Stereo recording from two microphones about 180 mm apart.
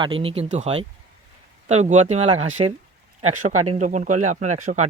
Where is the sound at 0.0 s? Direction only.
30° right (ahead or behind).